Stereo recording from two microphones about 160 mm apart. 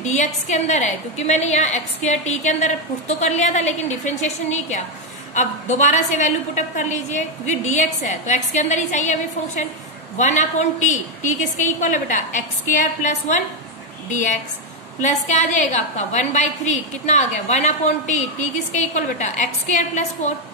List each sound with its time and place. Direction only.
0.0 s a woman's voice: 45° left (ahead or behind)
15.0 s a woman's voice: 50° left (ahead or behind)